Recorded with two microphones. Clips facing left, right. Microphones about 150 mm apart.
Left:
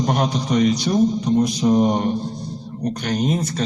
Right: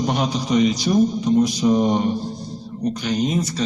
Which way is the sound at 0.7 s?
10° right (ahead or behind).